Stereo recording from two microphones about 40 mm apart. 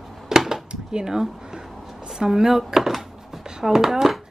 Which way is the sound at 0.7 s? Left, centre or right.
Right.